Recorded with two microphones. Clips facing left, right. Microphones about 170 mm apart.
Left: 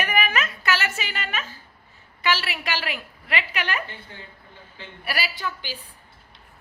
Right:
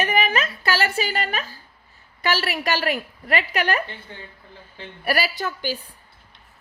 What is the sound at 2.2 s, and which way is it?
A woman's voice, 40° right (ahead or behind).